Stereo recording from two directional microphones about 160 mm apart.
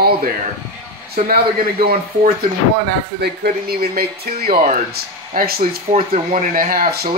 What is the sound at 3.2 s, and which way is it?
Speech, 75° right (ahead or behind).